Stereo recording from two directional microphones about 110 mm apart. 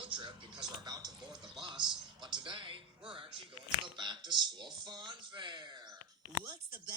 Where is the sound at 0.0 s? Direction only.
50° right (ahead or behind).